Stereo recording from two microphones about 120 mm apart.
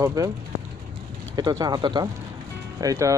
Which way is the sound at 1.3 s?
35° right (ahead or behind).